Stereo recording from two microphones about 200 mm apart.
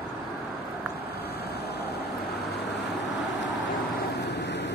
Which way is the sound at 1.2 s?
55° left (ahead or behind).